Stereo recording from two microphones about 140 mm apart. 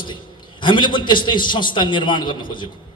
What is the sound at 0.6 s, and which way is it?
A man's voice, 35° left (ahead or behind).